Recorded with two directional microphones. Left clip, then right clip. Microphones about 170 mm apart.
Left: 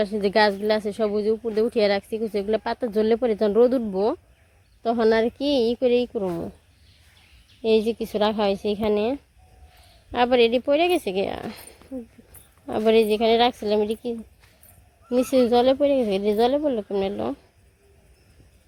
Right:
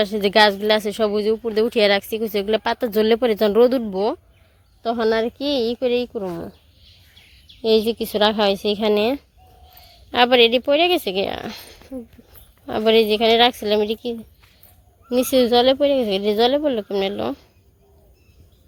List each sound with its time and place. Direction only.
0.0 s speech: 5° right (ahead or behind); by 6.2 s 15° left (ahead or behind)
7.6 s speech: centre (ahead or behind)